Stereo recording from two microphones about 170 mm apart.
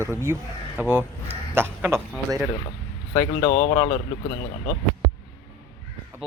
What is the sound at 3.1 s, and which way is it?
Speech, 20° left (ahead or behind).